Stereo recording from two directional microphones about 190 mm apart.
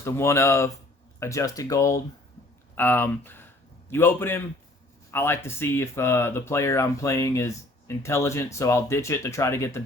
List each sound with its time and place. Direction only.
0.0 s a man's voice: 15° left (ahead or behind)